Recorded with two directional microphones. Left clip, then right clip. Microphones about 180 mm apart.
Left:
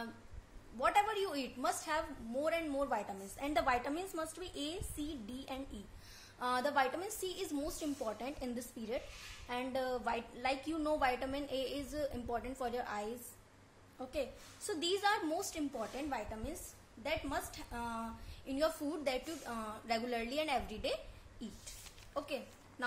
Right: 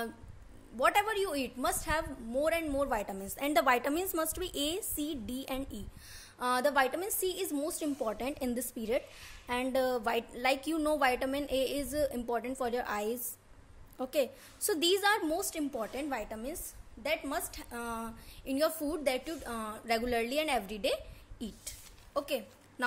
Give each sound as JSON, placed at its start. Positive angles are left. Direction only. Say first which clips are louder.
{"t": 0.7, "sound": "a woman's voice", "louder": "right 4 dB", "side_deg": -55}